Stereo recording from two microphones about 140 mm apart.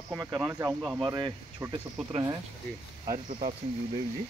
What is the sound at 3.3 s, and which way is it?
Speech, 60° right (ahead or behind).